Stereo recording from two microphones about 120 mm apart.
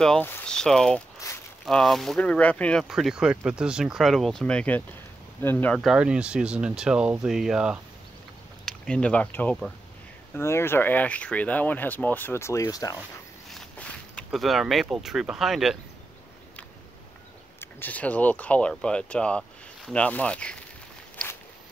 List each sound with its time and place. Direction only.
0.5 s speech: 5° left (ahead or behind)
2.8 s speech: centre (ahead or behind); by 5.8 s 15° left (ahead or behind)
5.8 s speech: 5° right (ahead or behind)
8.6 s speech: 5° left (ahead or behind); by 13.0 s 30° left (ahead or behind)
13.5 s a sound: 5° left (ahead or behind)
14.3 s speech: centre (ahead or behind)
17.6 s speech: 15° left (ahead or behind)